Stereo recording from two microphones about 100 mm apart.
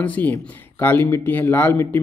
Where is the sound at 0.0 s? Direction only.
15° left (ahead or behind).